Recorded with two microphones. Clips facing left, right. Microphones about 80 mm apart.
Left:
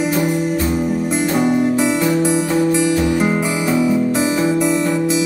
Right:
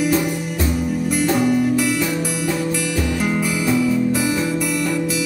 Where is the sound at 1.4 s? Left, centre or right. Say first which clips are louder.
Left 3 dB; left.